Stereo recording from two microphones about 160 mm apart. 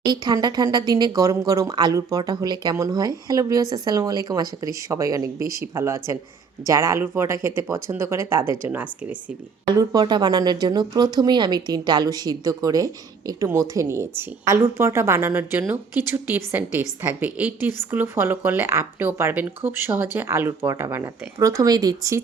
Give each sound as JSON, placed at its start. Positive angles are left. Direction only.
{"t": 0.0, "sound": "speech", "side_deg": -25}
{"t": 9.6, "sound": "speech", "side_deg": -25}